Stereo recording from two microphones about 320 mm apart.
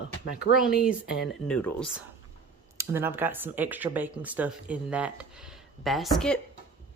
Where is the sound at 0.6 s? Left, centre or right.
Centre.